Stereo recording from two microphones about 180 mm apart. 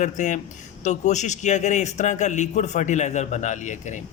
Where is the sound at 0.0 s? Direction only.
40° left (ahead or behind).